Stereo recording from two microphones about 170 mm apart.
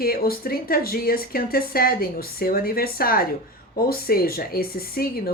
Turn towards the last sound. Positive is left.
turn(degrees=60)  # may be behind; listen again after turning